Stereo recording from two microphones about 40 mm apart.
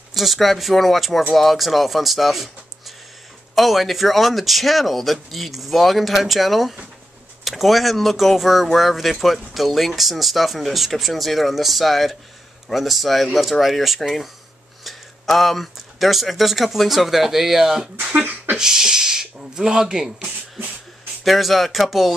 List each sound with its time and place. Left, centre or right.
0.1 s speech: centre
3.5 s speech: centre
18.2 s a sound: right
18.6 s speech: centre
21.2 s speech: centre